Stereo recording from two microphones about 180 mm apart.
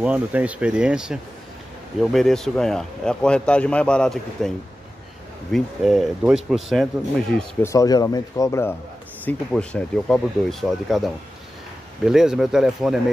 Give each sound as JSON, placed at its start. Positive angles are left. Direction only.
{"t": 0.0, "sound": "speech", "side_deg": -5}
{"t": 5.5, "sound": "speech", "side_deg": 0}
{"t": 7.6, "sound": "speech", "side_deg": 20}